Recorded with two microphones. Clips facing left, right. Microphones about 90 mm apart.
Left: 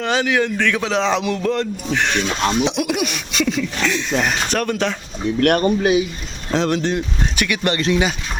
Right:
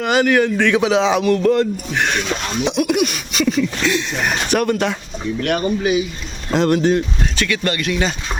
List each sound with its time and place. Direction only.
0.0 s speech: 5° right (ahead or behind)
0.5 s a man's voice: 15° right (ahead or behind)
1.2 s speech: centre (ahead or behind)
5.4 s speech: 60° left (ahead or behind)
6.5 s speech: 5° right (ahead or behind)
7.3 s speech: 20° left (ahead or behind)